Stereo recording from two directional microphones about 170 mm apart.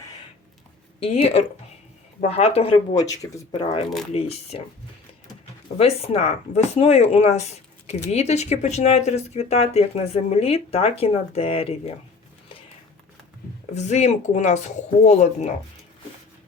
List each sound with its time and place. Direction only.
0.9 s speech: 35° left (ahead or behind)
2.9 s speech: 20° left (ahead or behind); by 4.6 s 35° left (ahead or behind)
5.7 s speech: 35° left (ahead or behind)
13.7 s speech: 40° left (ahead or behind)